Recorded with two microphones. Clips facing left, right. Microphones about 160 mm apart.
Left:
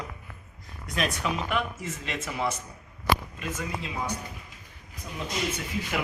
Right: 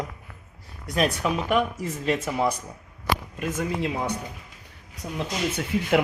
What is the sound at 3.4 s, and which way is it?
Speech, 60° right (ahead or behind).